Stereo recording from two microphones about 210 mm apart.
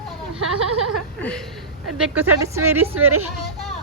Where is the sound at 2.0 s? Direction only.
5° right (ahead or behind).